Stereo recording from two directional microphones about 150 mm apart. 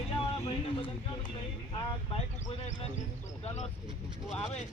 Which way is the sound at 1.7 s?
30° left (ahead or behind).